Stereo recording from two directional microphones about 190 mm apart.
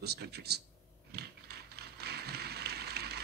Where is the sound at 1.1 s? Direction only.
55° right (ahead or behind).